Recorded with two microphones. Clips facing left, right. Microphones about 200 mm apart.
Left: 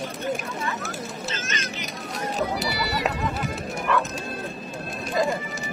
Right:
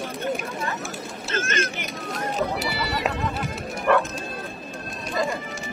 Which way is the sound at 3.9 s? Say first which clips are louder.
Right 5 dB; 55° right (ahead or behind).